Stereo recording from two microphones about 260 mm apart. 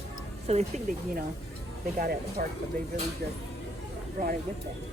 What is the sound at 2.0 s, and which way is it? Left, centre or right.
Speech, right.